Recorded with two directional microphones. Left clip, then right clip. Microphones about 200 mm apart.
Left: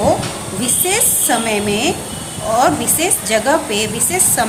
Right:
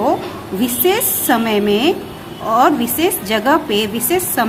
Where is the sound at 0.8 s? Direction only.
20° right (ahead or behind).